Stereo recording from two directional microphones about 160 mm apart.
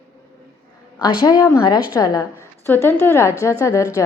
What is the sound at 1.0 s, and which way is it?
A woman's voice, 25° left (ahead or behind).